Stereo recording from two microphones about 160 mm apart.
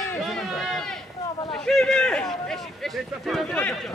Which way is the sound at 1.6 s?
5° left (ahead or behind).